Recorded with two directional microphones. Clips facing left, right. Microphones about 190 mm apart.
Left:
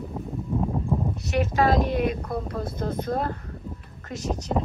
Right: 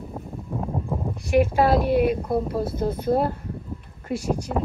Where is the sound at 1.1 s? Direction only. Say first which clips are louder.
Right 7 dB; 10° right (ahead or behind).